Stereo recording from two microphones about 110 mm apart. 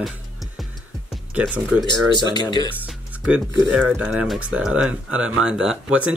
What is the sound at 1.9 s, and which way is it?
Speech, 45° left (ahead or behind).